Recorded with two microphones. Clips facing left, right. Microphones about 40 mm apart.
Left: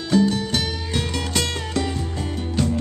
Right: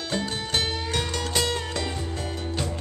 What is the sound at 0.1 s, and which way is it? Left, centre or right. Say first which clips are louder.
Music: left 10 dB; right.